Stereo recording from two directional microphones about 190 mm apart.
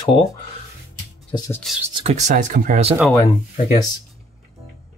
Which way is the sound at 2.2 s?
40° right (ahead or behind).